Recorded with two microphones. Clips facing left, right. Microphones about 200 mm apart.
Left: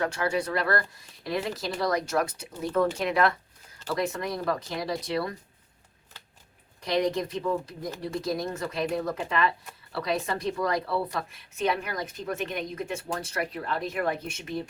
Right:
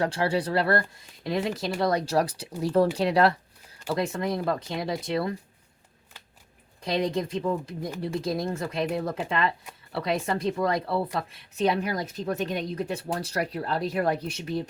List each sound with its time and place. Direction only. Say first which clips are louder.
0.0 s speech: right 2 dB; 30° right (ahead or behind)
6.8 s speech: even; 30° right (ahead or behind)